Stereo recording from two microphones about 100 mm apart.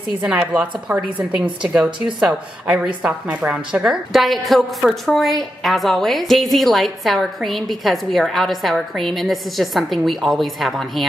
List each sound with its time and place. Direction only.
0.2 s speech: 10° right (ahead or behind)
2.1 s a woman's voice: 5° right (ahead or behind)